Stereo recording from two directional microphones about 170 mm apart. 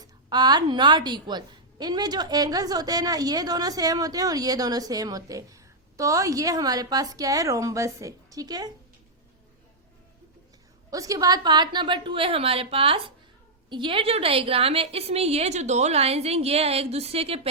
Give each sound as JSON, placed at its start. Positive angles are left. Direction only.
{"t": 0.0, "sound": "a woman's voice", "side_deg": -25}
{"t": 10.9, "sound": "a woman's voice", "side_deg": -20}